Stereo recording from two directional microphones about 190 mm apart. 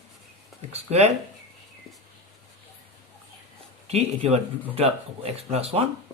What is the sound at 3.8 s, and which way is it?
Speech, 35° right (ahead or behind).